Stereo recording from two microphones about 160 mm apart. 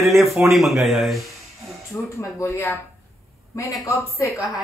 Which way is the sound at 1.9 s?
10° left (ahead or behind).